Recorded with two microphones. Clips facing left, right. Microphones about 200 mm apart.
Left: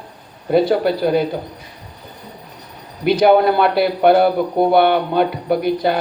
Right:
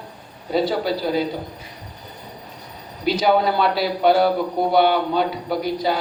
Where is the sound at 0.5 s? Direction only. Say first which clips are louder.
Left 6 dB; 60° left (ahead or behind).